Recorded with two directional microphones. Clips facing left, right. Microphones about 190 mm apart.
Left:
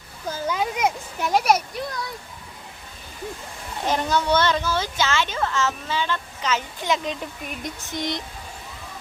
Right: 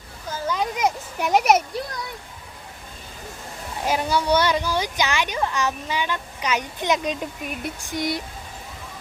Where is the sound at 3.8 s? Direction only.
10° right (ahead or behind).